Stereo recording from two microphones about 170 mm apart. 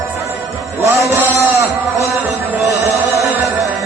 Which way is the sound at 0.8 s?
15° right (ahead or behind).